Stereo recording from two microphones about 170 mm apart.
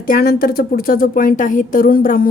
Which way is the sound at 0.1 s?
60° left (ahead or behind).